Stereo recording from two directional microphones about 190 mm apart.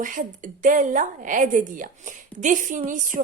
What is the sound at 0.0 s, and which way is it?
A woman's voice, 45° right (ahead or behind).